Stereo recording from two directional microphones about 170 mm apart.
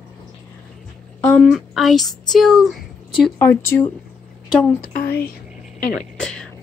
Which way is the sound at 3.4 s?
15° left (ahead or behind).